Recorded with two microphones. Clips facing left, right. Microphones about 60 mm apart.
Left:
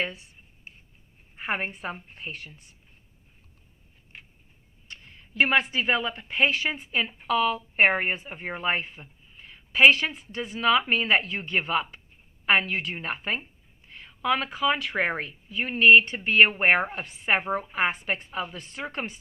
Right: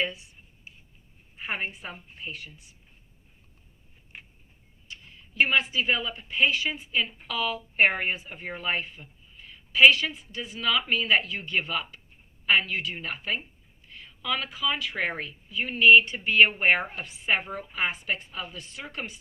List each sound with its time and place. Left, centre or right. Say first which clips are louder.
0.0 s a sound: right 1 dB; left
1.4 s speech: left 3 dB; left
4.9 s speech: even; left